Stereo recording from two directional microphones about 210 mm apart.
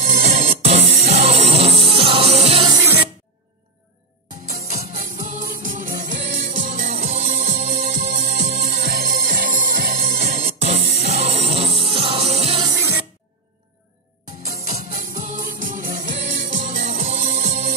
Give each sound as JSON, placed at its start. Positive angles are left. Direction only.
{"t": 0.0, "sound": "music", "side_deg": -30}
{"t": 2.7, "sound": "music", "side_deg": -10}
{"t": 4.6, "sound": "music", "side_deg": -40}
{"t": 10.7, "sound": "music", "side_deg": -30}
{"t": 12.6, "sound": "music", "side_deg": -15}
{"t": 15.0, "sound": "music", "side_deg": -40}